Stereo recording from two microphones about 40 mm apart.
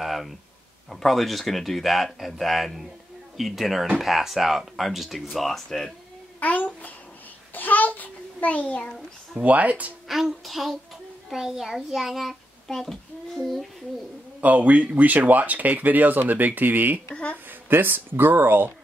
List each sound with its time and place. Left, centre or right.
0.0 s a sound: centre
0.8 s speech: centre
6.4 s a child's voice: left
7.5 s a sound: left
8.6 s a child's voice: left
9.4 s speech: right
10.0 s speech: centre
12.6 s speech: centre
14.4 s speech: right
17.1 s a child's voice: left
17.5 s speech: right